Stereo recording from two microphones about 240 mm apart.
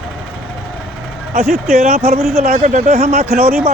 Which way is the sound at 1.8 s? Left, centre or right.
Right.